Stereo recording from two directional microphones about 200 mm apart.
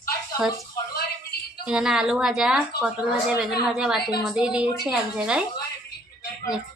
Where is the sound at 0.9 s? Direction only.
50° left (ahead or behind).